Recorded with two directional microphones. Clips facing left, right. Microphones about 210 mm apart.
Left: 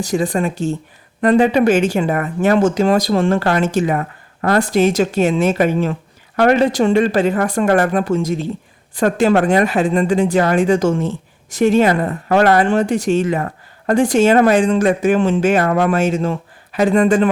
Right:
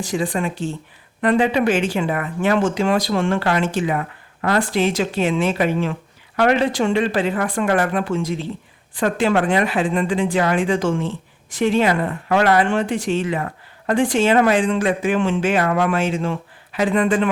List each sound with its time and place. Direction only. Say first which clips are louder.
0.0 s speech: left 4 dB; 40° left (ahead or behind)